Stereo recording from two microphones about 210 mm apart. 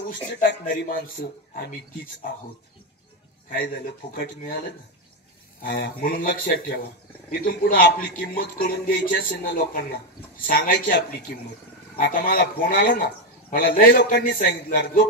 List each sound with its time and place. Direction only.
0.4 s speech: 45° left (ahead or behind)
4.1 s speech: 45° left (ahead or behind)
5.6 s speech: 45° left (ahead or behind)